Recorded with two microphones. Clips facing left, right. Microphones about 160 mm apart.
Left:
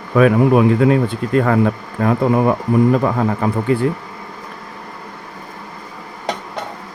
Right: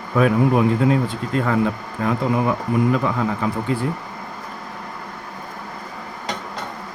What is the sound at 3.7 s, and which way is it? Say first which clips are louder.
Speech: left 8 dB; 60° left (ahead or behind).